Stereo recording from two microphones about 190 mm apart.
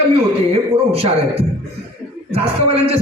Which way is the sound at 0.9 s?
30° right (ahead or behind).